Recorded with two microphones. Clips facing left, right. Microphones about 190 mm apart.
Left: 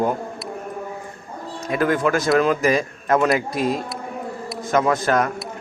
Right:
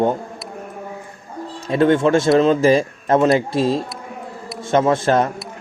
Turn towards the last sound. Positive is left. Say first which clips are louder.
# right 3 dB
turn(degrees=-30)  # may be behind; listen again after turning